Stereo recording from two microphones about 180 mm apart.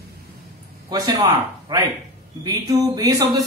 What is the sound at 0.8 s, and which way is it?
A man's voice, 20° right (ahead or behind).